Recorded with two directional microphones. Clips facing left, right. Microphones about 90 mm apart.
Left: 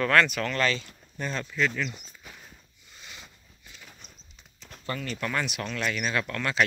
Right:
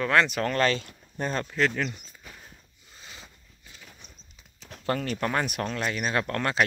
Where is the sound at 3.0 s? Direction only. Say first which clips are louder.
Even; 30° right (ahead or behind).